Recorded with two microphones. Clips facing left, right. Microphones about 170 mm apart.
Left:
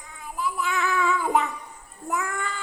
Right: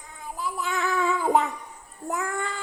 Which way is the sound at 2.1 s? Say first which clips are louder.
Even; 35° right (ahead or behind).